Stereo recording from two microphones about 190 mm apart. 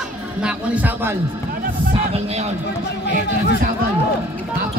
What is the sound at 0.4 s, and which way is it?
Speech, 10° right (ahead or behind).